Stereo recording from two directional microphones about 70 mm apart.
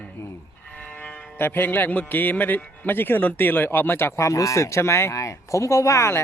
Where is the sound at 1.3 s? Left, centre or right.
Left.